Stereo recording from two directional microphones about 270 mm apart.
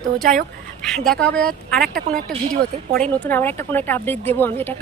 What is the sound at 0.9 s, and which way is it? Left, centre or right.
Speech, centre.